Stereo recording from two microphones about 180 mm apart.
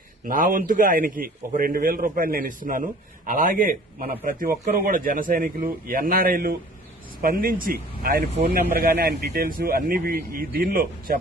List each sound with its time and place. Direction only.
0.3 s a man's voice: 50° right (ahead or behind)